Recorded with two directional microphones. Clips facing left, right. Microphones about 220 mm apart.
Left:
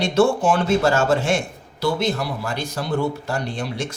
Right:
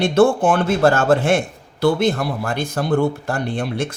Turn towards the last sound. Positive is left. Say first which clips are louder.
# right 4 dB
turn(degrees=-55)  # may be behind; listen again after turning